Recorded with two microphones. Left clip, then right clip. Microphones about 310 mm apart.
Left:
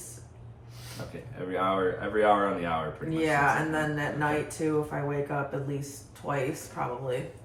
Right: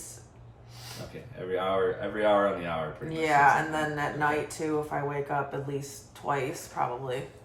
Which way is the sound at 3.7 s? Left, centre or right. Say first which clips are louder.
Even; centre.